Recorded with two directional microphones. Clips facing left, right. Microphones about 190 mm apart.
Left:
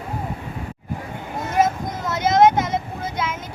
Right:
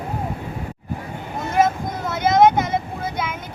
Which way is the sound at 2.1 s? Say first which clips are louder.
Even; 55° right (ahead or behind).